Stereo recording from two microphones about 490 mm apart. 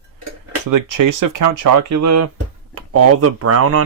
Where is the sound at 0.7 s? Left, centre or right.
Right.